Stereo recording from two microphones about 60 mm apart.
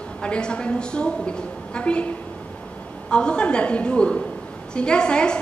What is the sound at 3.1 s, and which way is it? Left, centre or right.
A woman's voice, centre.